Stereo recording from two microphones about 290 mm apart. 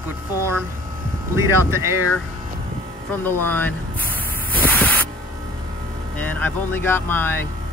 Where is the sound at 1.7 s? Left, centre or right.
Centre.